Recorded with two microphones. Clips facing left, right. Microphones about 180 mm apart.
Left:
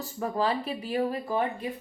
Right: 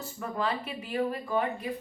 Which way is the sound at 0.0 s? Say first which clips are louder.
Left 4 dB; 35° left (ahead or behind).